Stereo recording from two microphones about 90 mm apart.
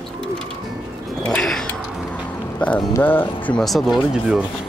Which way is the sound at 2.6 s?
15° left (ahead or behind).